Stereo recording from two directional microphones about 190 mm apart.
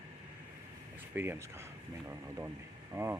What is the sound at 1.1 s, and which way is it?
Speech, 10° right (ahead or behind).